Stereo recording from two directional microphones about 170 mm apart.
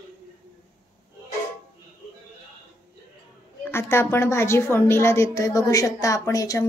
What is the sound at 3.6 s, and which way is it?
A woman's voice, 15° left (ahead or behind).